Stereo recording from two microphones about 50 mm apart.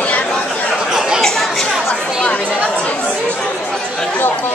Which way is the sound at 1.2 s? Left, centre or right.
Centre.